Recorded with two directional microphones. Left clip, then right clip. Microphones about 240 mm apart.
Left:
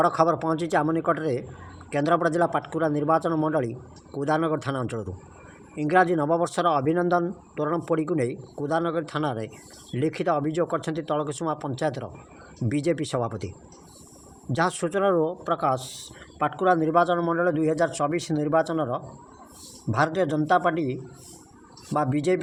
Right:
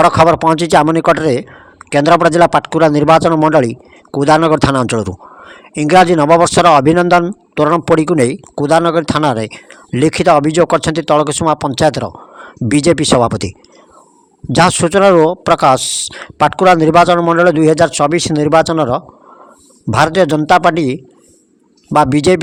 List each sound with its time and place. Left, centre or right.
0.0 s speech: right
14.5 s speech: right